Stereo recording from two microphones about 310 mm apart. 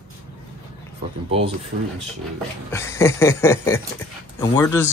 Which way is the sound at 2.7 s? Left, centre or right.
Centre.